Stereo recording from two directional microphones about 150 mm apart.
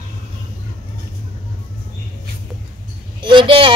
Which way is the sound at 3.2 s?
35° right (ahead or behind).